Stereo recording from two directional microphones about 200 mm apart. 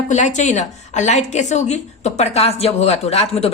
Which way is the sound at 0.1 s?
35° left (ahead or behind).